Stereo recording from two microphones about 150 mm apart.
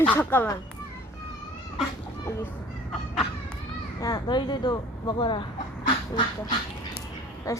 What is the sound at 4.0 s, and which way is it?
Speech, 25° left (ahead or behind).